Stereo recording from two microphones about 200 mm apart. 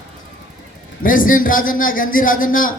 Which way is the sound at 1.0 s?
45° left (ahead or behind).